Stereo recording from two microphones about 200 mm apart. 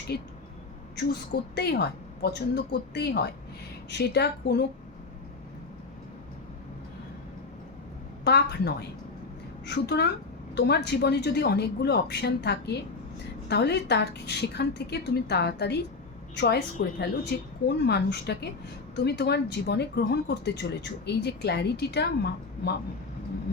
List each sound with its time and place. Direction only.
0.1 s a woman's voice: 55° left (ahead or behind)
1.5 s a woman's voice: 55° left (ahead or behind)
8.2 s a woman's voice: 55° left (ahead or behind)